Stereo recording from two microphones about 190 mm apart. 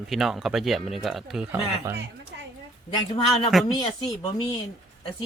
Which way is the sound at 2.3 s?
70° right (ahead or behind).